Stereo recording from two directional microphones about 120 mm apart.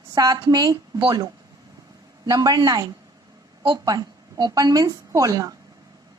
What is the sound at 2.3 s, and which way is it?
A woman's voice, 30° right (ahead or behind).